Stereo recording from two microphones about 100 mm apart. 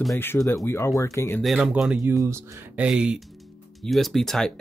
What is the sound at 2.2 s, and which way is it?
Speech, 30° right (ahead or behind).